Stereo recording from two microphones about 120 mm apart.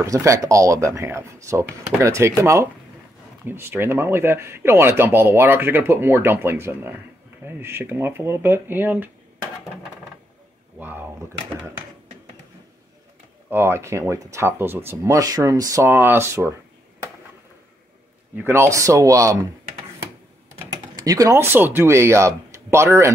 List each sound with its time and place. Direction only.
0.0 s speech: 25° right (ahead or behind)
10.8 s speech: 15° right (ahead or behind)
13.5 s speech: 20° right (ahead or behind)
18.3 s speech: 20° right (ahead or behind)
20.5 s speech: 30° right (ahead or behind)